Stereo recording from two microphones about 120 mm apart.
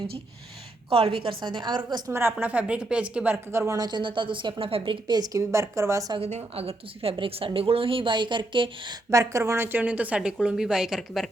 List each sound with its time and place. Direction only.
0.9 s a woman's voice: 50° right (ahead or behind)
2.1 s a woman's voice: 15° right (ahead or behind)
6.1 s a woman's voice: 60° right (ahead or behind); by 9.0 s 40° right (ahead or behind)
9.0 s speech: 25° right (ahead or behind); by 11.3 s 5° right (ahead or behind)